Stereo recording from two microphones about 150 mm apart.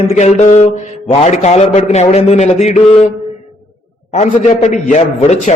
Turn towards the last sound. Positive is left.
turn(degrees=50)  # may be behind; listen again after turning